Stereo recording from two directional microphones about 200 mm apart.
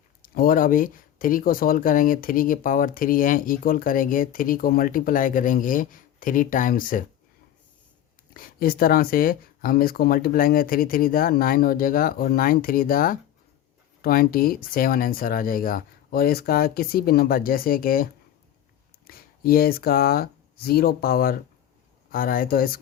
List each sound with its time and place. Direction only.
0.2 s speech: 45° left (ahead or behind)
8.3 s speech: 45° left (ahead or behind)